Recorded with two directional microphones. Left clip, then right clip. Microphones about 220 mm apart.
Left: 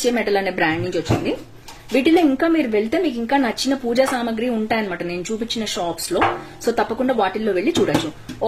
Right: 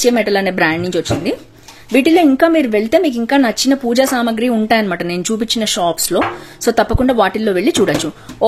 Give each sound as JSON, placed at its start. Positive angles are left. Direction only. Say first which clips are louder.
{"t": 0.0, "sound": "speech", "louder": "right 6 dB", "side_deg": -30}